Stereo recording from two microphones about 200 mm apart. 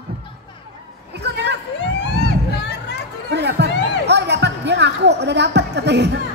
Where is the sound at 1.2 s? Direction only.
60° right (ahead or behind).